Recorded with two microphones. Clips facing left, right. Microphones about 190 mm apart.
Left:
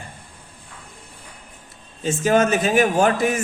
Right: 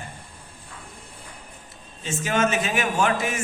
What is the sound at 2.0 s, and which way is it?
A man's voice, 40° left (ahead or behind).